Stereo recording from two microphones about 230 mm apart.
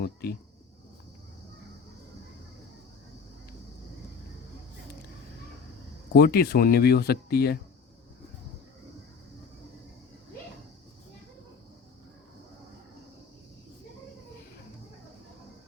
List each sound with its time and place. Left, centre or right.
0.0 s speech: left
6.1 s speech: left